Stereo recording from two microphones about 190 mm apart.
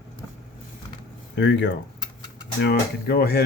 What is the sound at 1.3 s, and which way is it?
Speech, 65° left (ahead or behind).